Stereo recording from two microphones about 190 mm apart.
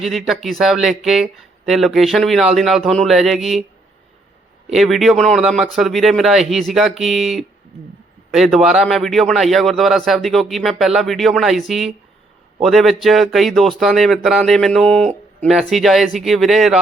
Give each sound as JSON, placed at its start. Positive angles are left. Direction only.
{"t": 0.0, "sound": "speech", "side_deg": 0}
{"t": 4.7, "sound": "speech", "side_deg": 0}